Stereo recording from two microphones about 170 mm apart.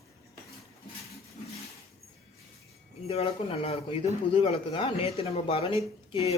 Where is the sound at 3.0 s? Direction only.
35° left (ahead or behind).